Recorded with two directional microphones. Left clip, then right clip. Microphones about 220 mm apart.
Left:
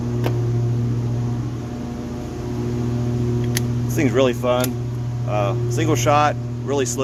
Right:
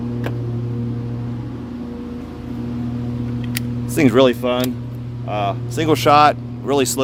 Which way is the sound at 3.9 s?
45° right (ahead or behind).